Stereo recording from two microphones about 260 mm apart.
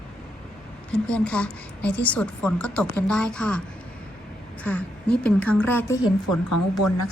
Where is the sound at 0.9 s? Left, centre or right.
Centre.